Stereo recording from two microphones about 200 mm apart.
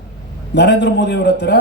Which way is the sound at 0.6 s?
60° left (ahead or behind).